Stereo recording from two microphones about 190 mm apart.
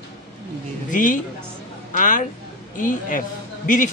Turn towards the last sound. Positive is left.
turn(degrees=45)  # may be behind; listen again after turning